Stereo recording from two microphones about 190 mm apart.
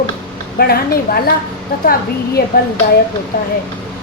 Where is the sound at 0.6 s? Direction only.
55° left (ahead or behind).